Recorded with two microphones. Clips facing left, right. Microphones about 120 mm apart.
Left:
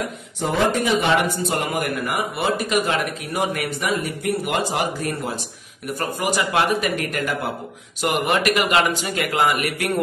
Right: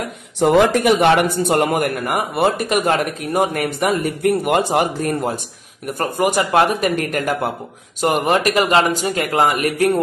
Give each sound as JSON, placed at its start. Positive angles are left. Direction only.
{"t": 0.4, "sound": "speech", "side_deg": -80}